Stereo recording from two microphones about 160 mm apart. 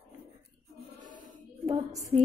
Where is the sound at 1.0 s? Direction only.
55° right (ahead or behind).